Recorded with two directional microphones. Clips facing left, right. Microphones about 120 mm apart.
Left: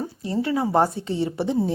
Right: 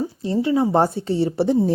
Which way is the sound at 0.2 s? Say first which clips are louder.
Right 4 dB; 25° right (ahead or behind).